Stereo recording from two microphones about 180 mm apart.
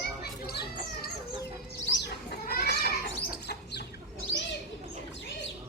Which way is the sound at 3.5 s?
65° left (ahead or behind).